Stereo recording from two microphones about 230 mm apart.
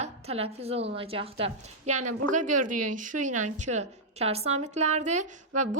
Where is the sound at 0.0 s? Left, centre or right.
Right.